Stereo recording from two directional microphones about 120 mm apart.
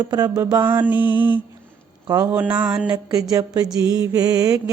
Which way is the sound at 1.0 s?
40° left (ahead or behind).